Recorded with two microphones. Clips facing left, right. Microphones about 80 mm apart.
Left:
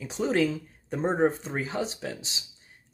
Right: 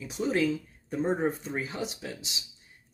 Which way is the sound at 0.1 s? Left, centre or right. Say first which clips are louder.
Left 2 dB; left.